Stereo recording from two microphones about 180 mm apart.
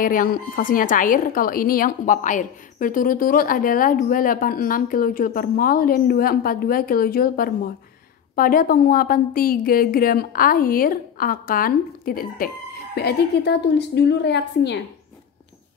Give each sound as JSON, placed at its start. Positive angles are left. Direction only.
{"t": 0.0, "sound": "a woman's voice", "side_deg": 50}
{"t": 12.9, "sound": "a woman's voice", "side_deg": 65}